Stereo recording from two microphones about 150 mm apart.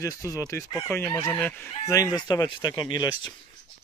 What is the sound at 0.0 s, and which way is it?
Speech, 20° left (ahead or behind).